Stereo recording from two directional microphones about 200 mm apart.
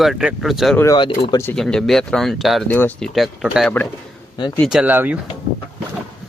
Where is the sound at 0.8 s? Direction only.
20° left (ahead or behind).